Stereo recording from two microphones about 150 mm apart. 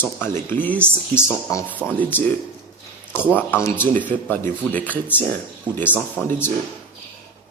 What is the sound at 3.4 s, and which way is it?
A man's voice, 15° left (ahead or behind).